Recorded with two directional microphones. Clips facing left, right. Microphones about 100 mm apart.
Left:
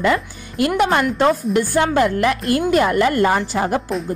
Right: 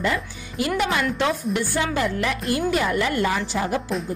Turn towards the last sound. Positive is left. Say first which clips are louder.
# left 5 dB
turn(degrees=50)  # may be behind; listen again after turning